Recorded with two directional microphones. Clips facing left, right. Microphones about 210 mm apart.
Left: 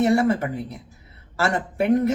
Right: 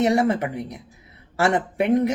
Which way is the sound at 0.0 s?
15° right (ahead or behind).